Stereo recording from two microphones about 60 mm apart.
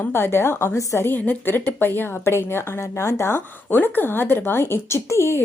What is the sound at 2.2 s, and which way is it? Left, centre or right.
Speech, left.